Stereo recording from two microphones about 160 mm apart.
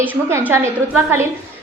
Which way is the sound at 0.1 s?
15° right (ahead or behind).